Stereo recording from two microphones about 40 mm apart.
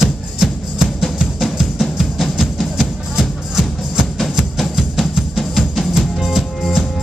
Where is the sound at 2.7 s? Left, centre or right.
Centre.